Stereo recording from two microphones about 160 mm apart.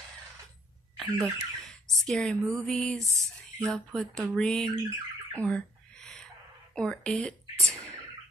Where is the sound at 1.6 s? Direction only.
Centre (ahead or behind).